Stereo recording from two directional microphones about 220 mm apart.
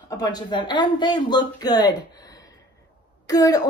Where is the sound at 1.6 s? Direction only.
20° left (ahead or behind).